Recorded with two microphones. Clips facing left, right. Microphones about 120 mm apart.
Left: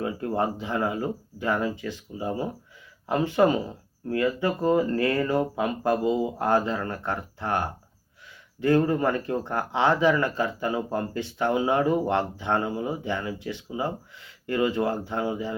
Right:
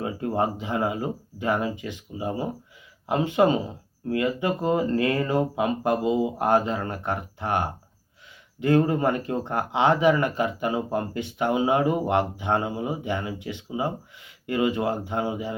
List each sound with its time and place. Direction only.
0.0 s speech: 20° right (ahead or behind)